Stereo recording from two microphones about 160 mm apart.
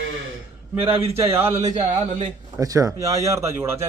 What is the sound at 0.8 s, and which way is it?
Speech, 35° right (ahead or behind).